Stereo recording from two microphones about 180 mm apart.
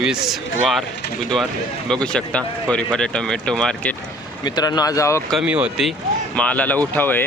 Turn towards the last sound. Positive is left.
turn(degrees=10)  # may be behind; listen again after turning